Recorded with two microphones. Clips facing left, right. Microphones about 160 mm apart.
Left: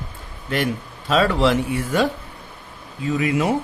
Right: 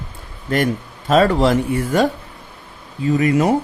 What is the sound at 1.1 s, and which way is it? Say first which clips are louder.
Speech: right 4 dB; 40° right (ahead or behind).